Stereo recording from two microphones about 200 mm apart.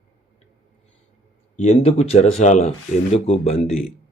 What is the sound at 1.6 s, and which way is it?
Speech, 35° left (ahead or behind).